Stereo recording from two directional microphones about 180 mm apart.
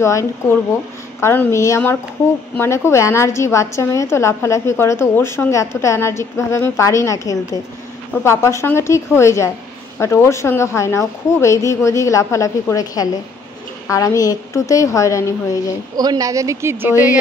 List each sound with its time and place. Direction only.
0.0 s a woman's voice: 15° left (ahead or behind)
16.0 s speech: 20° right (ahead or behind)